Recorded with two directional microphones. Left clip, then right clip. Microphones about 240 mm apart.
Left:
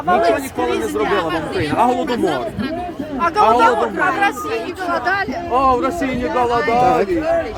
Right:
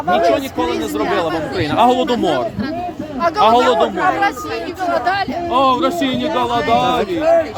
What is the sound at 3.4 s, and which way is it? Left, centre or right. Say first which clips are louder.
Speech: right 1 dB; right.